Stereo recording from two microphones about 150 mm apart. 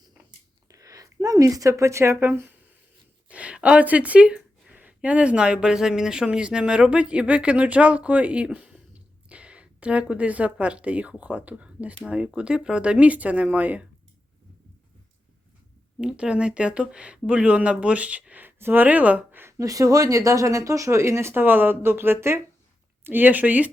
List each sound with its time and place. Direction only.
0.7 s speech: 20° right (ahead or behind)
16.0 s speech: 5° right (ahead or behind)